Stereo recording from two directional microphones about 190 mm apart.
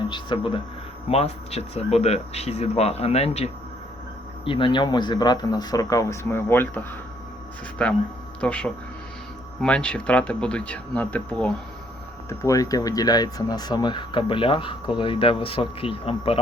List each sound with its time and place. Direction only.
0.1 s speech: 25° left (ahead or behind)